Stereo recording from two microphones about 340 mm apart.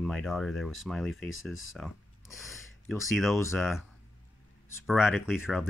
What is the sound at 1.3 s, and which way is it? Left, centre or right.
Speech, left.